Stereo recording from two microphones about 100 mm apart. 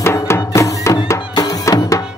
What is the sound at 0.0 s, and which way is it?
Music, 25° left (ahead or behind).